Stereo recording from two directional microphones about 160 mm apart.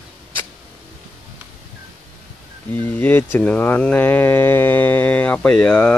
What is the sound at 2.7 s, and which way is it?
Speech, 10° left (ahead or behind).